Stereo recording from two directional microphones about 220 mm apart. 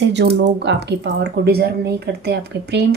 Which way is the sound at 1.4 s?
45° right (ahead or behind).